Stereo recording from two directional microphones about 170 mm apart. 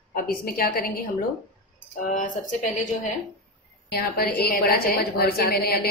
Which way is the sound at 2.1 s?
50° left (ahead or behind).